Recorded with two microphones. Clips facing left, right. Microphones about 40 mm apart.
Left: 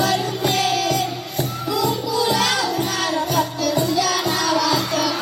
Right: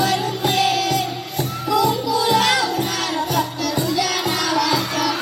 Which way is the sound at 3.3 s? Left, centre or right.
Centre.